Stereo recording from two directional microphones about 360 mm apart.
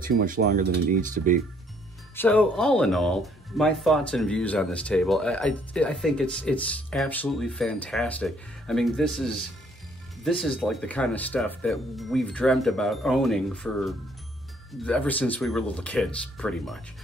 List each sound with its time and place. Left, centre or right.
0.0 s speech: right
2.1 s speech: centre